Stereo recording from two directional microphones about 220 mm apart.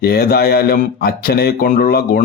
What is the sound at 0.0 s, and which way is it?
Speech, 45° left (ahead or behind).